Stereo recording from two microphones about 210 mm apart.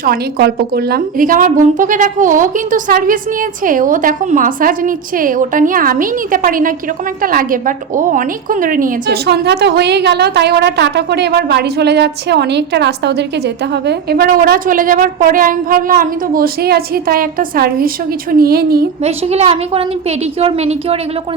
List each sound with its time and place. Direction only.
0.0 s a woman's voice: 45° right (ahead or behind)
19.0 s a woman's voice: 30° right (ahead or behind)